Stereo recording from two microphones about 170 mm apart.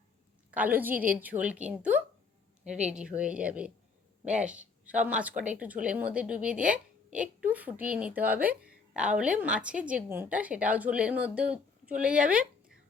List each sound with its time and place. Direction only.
0.5 s a woman's voice: 10° right (ahead or behind)
2.6 s speech: 45° right (ahead or behind)
2.9 s a woman's voice: 5° right (ahead or behind)